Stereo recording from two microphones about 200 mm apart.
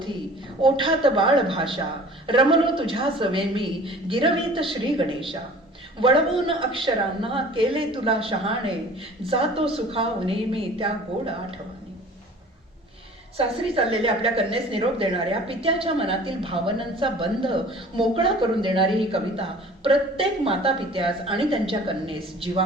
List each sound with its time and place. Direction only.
0.6 s a woman's voice: 25° right (ahead or behind)
13.3 s a woman's voice: 30° right (ahead or behind)